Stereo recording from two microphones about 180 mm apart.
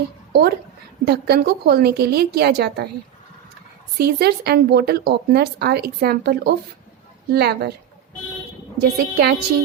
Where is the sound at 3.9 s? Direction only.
60° right (ahead or behind).